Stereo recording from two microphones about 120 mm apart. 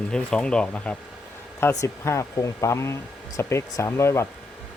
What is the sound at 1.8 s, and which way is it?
Speech, 25° left (ahead or behind).